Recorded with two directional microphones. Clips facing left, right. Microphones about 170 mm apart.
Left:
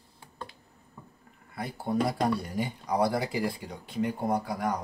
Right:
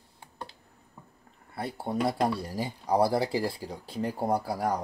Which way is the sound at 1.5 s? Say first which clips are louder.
Left 1 dB; 30° right (ahead or behind).